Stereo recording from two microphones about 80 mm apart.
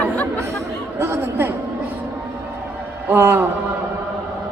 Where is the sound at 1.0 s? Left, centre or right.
Right.